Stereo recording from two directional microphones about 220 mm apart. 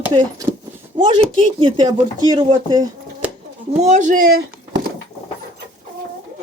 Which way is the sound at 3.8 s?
35° right (ahead or behind).